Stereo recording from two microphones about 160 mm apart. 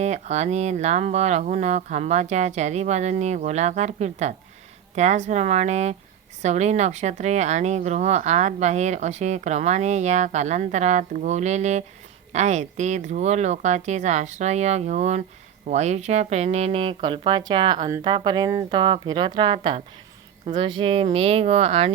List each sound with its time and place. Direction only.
0.0 s a woman's voice: 45° right (ahead or behind)